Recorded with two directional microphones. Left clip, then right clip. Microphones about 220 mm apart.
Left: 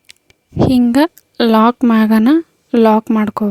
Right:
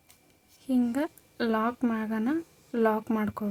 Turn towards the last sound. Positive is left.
turn(degrees=40)  # may be behind; listen again after turning